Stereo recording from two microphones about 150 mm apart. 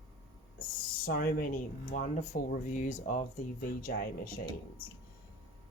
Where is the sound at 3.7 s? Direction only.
75° left (ahead or behind).